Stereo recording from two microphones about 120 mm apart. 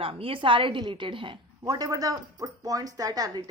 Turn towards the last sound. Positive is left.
turn(degrees=-35)  # may be behind; listen again after turning